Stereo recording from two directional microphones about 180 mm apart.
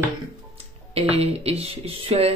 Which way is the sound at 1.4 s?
35° right (ahead or behind).